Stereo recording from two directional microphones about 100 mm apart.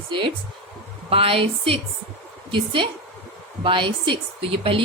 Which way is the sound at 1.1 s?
70° right (ahead or behind).